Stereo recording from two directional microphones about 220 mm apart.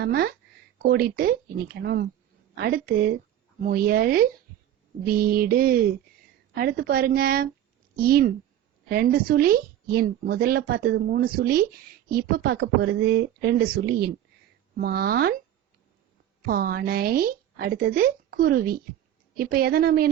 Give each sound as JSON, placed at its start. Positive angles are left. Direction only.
{"t": 0.0, "sound": "speech", "side_deg": -45}
{"t": 16.5, "sound": "speech", "side_deg": -45}